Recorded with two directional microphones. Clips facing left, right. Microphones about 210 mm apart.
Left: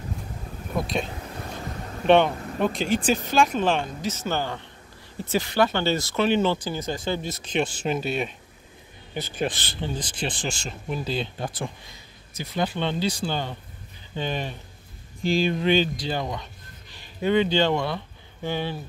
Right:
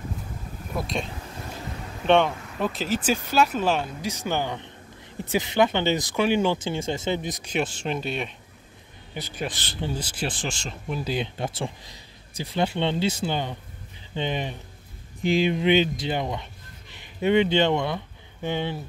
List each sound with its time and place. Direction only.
0.7 s a sound: centre (ahead or behind)
2.0 s speech: centre (ahead or behind)
6.6 s speech: 25° right (ahead or behind); by 8.3 s 5° left (ahead or behind)
9.2 s speech: 25° left (ahead or behind)
9.8 s speech: 10° right (ahead or behind)
11.1 s speech: 15° right (ahead or behind)